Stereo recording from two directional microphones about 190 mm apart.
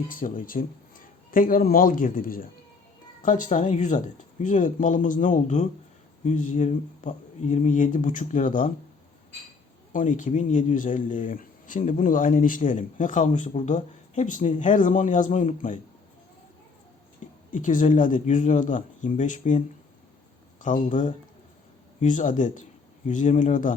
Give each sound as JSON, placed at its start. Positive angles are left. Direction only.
{"t": 0.1, "sound": "speech", "side_deg": 45}
{"t": 9.9, "sound": "speech", "side_deg": 45}
{"t": 17.5, "sound": "speech", "side_deg": 45}